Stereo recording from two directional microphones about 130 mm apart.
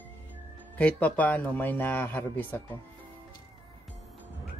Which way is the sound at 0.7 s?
10° left (ahead or behind).